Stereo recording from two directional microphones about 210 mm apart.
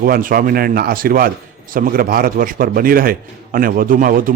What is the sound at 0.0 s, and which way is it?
A man's voice, 40° right (ahead or behind).